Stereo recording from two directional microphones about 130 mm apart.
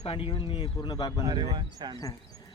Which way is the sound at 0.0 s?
45° left (ahead or behind).